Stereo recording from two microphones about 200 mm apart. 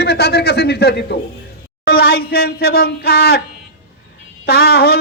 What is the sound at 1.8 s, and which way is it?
Speech, 50° left (ahead or behind).